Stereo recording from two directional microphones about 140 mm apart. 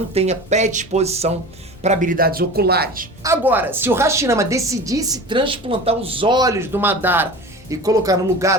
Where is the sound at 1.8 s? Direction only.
60° right (ahead or behind); by 3.1 s 90° right.